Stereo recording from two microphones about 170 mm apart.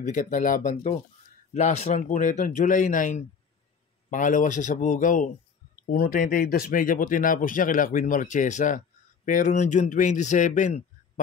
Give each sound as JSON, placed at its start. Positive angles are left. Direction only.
{"t": 0.0, "sound": "speech", "side_deg": 50}